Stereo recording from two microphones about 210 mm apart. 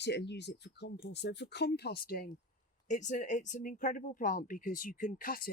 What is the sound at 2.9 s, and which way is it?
Speech, 35° left (ahead or behind).